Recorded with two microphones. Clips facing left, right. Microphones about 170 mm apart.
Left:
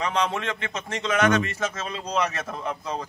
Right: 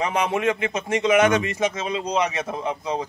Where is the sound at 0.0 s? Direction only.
15° right (ahead or behind).